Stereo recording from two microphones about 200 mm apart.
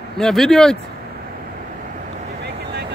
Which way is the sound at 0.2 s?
Centre (ahead or behind).